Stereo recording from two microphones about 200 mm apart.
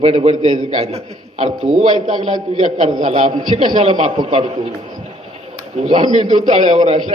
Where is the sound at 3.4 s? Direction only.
20° right (ahead or behind).